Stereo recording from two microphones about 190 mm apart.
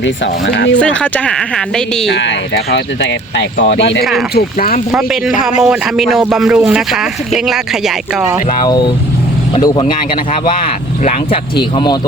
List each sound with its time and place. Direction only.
0.0 s speech: 70° left (ahead or behind)
0.8 s speech: 5° left (ahead or behind)
2.0 s speech: 70° left (ahead or behind)
4.4 s speech: 50° left (ahead or behind)
4.9 s speech: 5° right (ahead or behind)
8.4 s speech: 25° left (ahead or behind)
11.0 s speech: 25° left (ahead or behind)